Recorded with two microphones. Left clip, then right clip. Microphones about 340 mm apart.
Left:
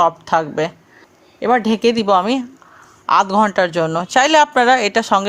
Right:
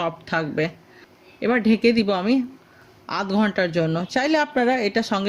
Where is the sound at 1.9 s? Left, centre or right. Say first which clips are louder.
Left 7 dB; centre.